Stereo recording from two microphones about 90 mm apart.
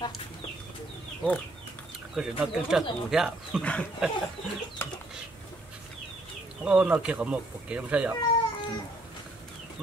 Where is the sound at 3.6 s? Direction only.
15° left (ahead or behind).